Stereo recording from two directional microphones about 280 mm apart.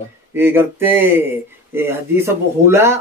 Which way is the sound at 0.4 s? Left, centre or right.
Centre.